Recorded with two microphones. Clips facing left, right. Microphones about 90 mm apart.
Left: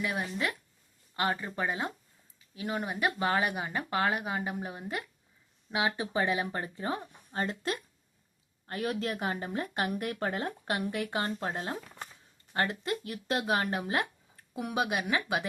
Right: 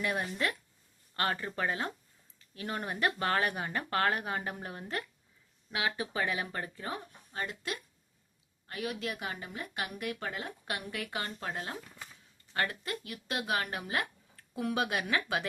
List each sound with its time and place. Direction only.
0.0 s speech: 5° left (ahead or behind)
5.7 s speech: 25° left (ahead or behind)